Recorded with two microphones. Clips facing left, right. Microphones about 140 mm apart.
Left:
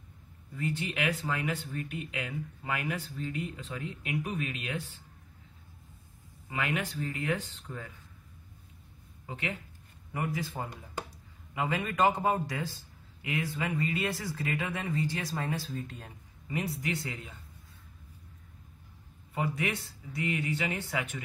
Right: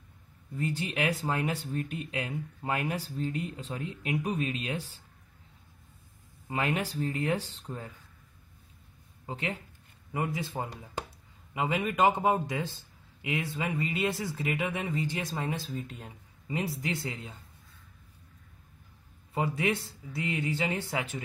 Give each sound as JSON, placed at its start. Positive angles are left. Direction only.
{"t": 0.6, "sound": "speech", "side_deg": -35}
{"t": 6.5, "sound": "speech", "side_deg": -35}
{"t": 9.2, "sound": "speech", "side_deg": -35}
{"t": 10.1, "sound": "speech", "side_deg": -20}
{"t": 19.3, "sound": "speech", "side_deg": -30}